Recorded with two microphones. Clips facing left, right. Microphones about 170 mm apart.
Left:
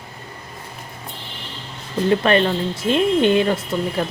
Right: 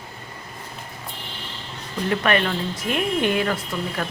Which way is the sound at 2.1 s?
30° left (ahead or behind).